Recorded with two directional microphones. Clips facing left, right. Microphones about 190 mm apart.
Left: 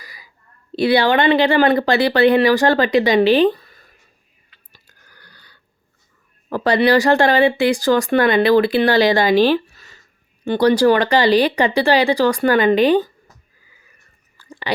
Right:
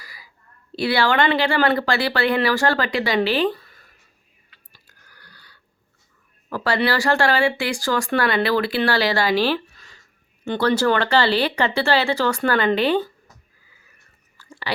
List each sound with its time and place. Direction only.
0.0 s a sound: 20° left (ahead or behind)
0.8 s speech: 20° left (ahead or behind)
4.5 s chewing: 20° left (ahead or behind)
6.5 s speech: 20° left (ahead or behind)
9.7 s a sound: 5° left (ahead or behind)
10.4 s speech: 10° left (ahead or behind)
14.3 s whispering: 15° left (ahead or behind)